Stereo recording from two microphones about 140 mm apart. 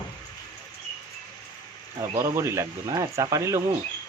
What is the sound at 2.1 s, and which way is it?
Speech, 20° right (ahead or behind).